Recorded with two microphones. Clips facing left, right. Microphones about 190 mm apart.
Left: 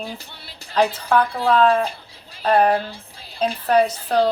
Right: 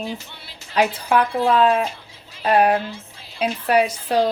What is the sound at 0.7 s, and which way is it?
Speech, 15° right (ahead or behind).